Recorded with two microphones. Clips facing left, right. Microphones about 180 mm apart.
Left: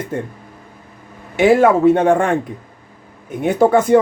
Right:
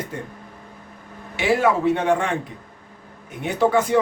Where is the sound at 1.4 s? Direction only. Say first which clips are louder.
Left 8 dB; 50° left (ahead or behind).